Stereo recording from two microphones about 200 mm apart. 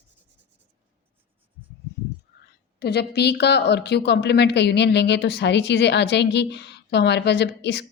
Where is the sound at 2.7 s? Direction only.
55° left (ahead or behind).